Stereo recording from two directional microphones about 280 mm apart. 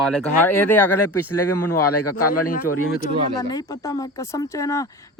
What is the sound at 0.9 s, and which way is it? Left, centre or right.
A man's voice, left.